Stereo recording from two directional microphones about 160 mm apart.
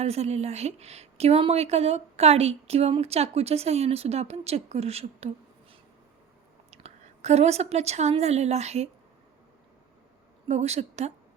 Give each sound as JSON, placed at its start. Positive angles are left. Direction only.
{"t": 0.0, "sound": "a woman's voice", "side_deg": -40}
{"t": 6.7, "sound": "a woman's voice", "side_deg": -45}
{"t": 10.5, "sound": "a woman's voice", "side_deg": -45}